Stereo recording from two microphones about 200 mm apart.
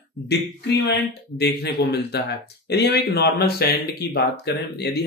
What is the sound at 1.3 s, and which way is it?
Speech, 55° left (ahead or behind).